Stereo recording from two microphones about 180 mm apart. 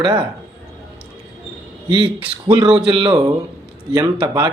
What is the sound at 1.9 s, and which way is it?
A man's voice, 30° right (ahead or behind).